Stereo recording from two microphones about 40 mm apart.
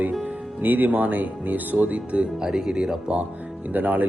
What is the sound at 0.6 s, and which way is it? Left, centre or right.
Speech, right.